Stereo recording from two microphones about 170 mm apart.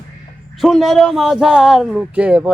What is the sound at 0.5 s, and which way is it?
A man's voice, centre (ahead or behind).